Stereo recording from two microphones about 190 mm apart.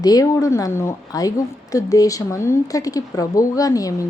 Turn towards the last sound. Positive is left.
turn(degrees=20)  # may be behind; listen again after turning